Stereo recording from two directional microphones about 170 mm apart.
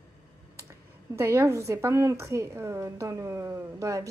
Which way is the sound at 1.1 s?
15° right (ahead or behind).